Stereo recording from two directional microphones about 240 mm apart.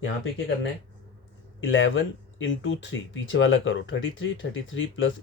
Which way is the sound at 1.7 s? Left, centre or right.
Left.